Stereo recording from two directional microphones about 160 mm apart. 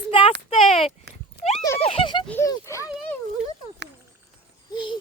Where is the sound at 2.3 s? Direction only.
15° left (ahead or behind).